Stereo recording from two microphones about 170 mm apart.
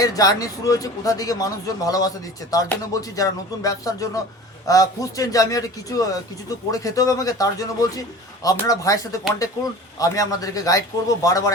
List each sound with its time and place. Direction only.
0.0 s speech: 20° left (ahead or behind)